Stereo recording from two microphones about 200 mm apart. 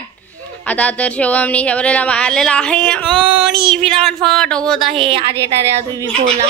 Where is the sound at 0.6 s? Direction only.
5° left (ahead or behind).